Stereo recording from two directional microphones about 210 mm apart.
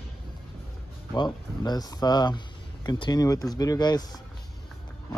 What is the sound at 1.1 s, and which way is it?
Speech, 20° left (ahead or behind).